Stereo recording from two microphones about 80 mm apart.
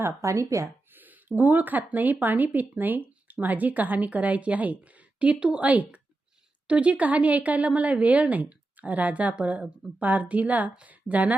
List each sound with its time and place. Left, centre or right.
0.0 s speech: right
0.9 s a woman's voice: right